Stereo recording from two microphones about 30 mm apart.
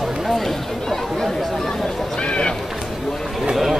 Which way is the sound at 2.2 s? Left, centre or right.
Left.